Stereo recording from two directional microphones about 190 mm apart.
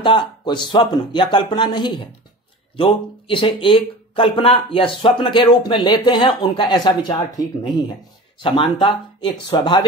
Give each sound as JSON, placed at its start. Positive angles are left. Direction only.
{"t": 0.0, "sound": "speech", "side_deg": 25}